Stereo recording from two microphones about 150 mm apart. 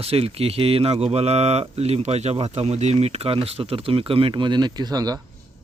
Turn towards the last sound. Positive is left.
turn(degrees=-25)  # may be behind; listen again after turning